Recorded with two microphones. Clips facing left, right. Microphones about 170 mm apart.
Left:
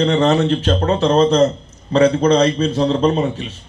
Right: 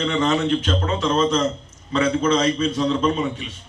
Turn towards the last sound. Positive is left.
turn(degrees=40)  # may be behind; listen again after turning